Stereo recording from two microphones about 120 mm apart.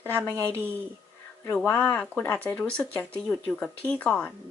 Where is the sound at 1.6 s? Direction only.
15° left (ahead or behind).